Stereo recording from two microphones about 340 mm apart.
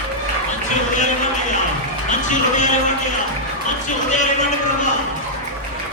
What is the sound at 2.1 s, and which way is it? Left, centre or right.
Speech, left.